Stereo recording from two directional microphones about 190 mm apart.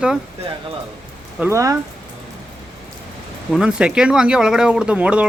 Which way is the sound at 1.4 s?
15° right (ahead or behind).